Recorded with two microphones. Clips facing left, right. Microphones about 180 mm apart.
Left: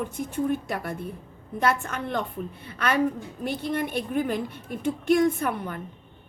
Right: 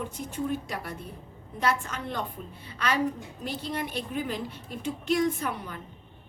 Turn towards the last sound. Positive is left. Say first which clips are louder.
# left 4 dB
turn(degrees=55)  # may be behind; listen again after turning